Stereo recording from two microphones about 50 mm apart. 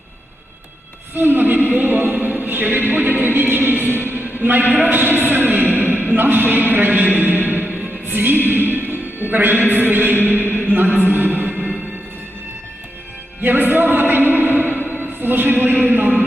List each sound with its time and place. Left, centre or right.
1.1 s speech: right
4.1 s a sound: right
6.1 s speech: right
7.4 s music: right
9.3 s speech: right
11.3 s music: right
13.4 s a sound: right
15.9 s speech: right